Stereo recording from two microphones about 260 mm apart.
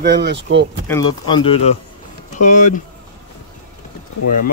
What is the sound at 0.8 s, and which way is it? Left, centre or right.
Speech, centre.